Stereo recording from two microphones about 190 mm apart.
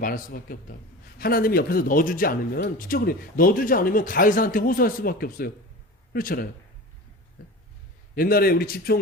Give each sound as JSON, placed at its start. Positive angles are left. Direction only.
{"t": 0.0, "sound": "speech", "side_deg": 50}
{"t": 8.1, "sound": "speech", "side_deg": 50}